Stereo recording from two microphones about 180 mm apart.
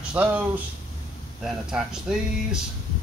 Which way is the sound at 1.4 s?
5° right (ahead or behind).